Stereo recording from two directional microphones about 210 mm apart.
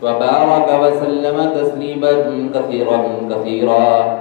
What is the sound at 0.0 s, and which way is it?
A man's voice, 50° right (ahead or behind).